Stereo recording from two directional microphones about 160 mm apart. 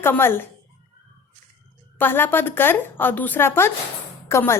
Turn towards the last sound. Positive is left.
turn(degrees=15)  # may be behind; listen again after turning